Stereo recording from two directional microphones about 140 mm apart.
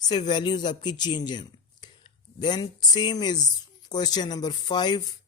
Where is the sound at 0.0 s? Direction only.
30° left (ahead or behind).